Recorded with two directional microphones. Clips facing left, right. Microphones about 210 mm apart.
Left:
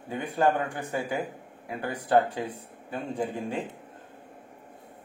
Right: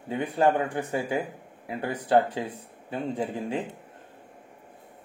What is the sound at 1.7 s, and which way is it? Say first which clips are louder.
Speech: right 1 dB; 25° right (ahead or behind).